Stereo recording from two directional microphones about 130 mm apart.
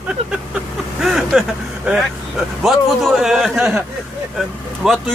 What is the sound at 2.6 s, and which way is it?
Speech, 5° right (ahead or behind).